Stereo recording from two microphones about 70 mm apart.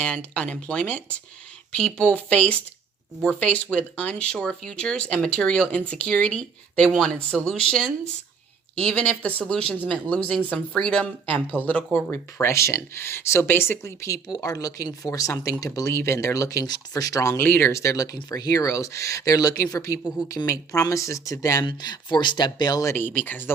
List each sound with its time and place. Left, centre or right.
0.0 s speech: centre
11.0 s speech: left
12.1 s speech: left
14.3 s speech: left
17.3 s speech: left
17.7 s speech: left
21.6 s speech: left
23.0 s speech: left